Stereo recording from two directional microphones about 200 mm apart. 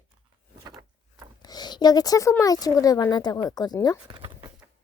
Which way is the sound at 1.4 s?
20° left (ahead or behind).